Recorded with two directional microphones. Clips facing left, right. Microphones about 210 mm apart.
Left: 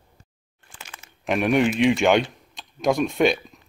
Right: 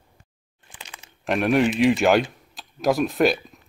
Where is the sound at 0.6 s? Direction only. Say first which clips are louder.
Even; 15° right (ahead or behind).